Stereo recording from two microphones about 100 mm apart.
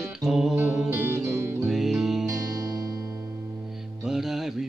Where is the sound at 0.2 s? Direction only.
5° right (ahead or behind).